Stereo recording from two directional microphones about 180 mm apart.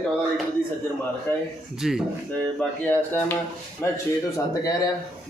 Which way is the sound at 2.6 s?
10° left (ahead or behind).